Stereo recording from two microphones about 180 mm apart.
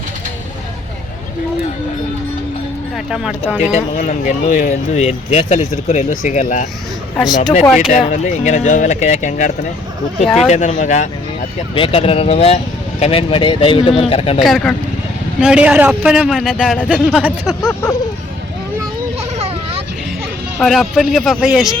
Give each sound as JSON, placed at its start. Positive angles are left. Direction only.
{"t": 3.6, "sound": "speech", "side_deg": 40}
{"t": 3.9, "sound": "speech", "side_deg": 50}
{"t": 7.2, "sound": "a man's voice", "side_deg": 0}
{"t": 7.9, "sound": "speech", "side_deg": 40}
{"t": 11.7, "sound": "speech", "side_deg": 30}
{"t": 14.3, "sound": "a man's voice", "side_deg": 0}
{"t": 17.6, "sound": "a sound", "side_deg": 15}
{"t": 20.6, "sound": "a man's voice", "side_deg": 0}